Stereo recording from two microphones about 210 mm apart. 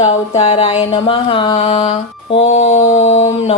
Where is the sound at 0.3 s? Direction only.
30° left (ahead or behind).